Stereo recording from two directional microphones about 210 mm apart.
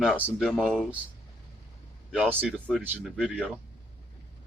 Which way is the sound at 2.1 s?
5° right (ahead or behind).